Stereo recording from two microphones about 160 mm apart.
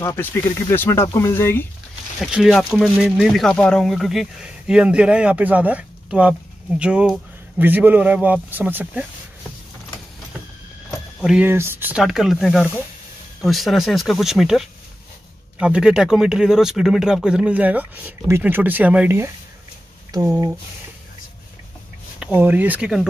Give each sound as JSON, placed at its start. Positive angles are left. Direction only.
{"t": 0.0, "sound": "speech", "side_deg": 15}
{"t": 2.1, "sound": "speech", "side_deg": 0}
{"t": 11.1, "sound": "speech", "side_deg": -5}
{"t": 22.2, "sound": "speech", "side_deg": -10}